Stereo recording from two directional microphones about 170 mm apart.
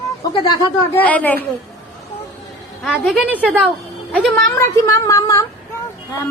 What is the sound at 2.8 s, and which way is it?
Speech, centre (ahead or behind).